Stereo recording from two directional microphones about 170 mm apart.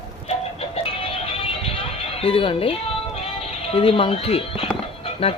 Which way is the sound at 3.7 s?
35° left (ahead or behind).